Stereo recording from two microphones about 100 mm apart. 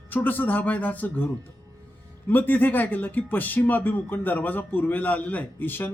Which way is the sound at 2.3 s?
20° left (ahead or behind).